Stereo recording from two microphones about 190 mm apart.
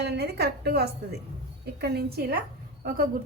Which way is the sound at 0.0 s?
60° right (ahead or behind).